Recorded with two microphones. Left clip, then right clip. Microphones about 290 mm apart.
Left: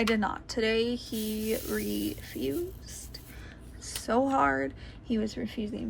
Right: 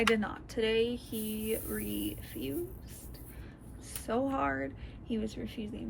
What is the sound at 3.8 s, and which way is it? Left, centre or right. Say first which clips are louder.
Speech: left 6 dB; centre.